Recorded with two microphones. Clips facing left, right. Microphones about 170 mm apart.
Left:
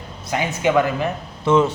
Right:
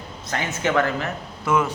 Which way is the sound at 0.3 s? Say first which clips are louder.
Left 4 dB; 10° left (ahead or behind).